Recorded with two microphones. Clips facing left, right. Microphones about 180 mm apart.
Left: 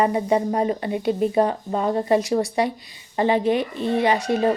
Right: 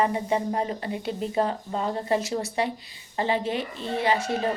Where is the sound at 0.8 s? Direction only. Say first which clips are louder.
Left 8 dB; 15° left (ahead or behind).